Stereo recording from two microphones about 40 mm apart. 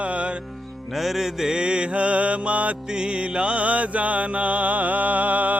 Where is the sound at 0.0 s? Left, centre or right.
Right.